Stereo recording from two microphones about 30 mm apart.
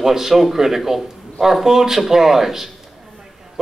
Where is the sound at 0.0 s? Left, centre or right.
Centre.